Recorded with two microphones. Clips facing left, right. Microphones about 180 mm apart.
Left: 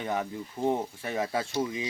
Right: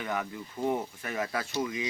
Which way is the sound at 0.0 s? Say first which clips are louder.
Left 2 dB; 25° left (ahead or behind).